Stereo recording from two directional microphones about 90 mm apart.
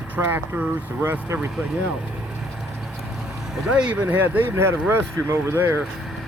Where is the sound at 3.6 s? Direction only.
10° right (ahead or behind).